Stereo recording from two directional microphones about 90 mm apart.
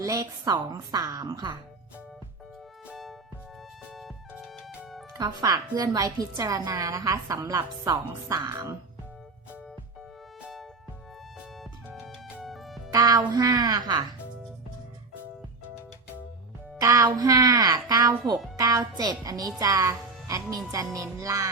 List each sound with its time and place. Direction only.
0.0 s a woman's voice: 40° right (ahead or behind)
2.9 s music: centre (ahead or behind)
5.4 s a woman's voice: 45° right (ahead or behind)
10.4 s music: 5° right (ahead or behind)
12.5 s music: centre (ahead or behind)
12.9 s a woman's voice: 45° right (ahead or behind)
16.8 s a woman's voice: 40° right (ahead or behind)